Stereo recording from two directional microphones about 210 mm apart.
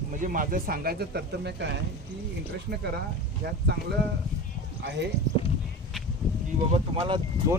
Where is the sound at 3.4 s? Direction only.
50° right (ahead or behind).